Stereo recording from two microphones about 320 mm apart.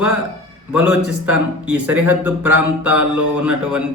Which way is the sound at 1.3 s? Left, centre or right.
Centre.